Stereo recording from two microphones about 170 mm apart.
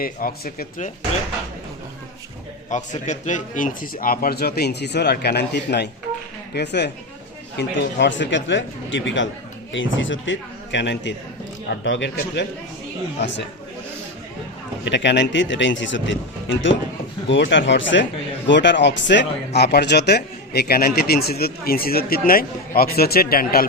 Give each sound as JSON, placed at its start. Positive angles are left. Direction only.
{"t": 0.0, "sound": "speech", "side_deg": 60}
{"t": 2.6, "sound": "a man's voice", "side_deg": 45}
{"t": 7.6, "sound": "speech", "side_deg": 90}
{"t": 14.8, "sound": "speech", "side_deg": 90}